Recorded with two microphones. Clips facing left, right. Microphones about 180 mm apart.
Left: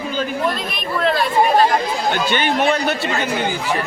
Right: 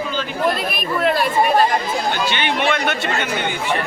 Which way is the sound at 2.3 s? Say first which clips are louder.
Left 3 dB; 40° left (ahead or behind).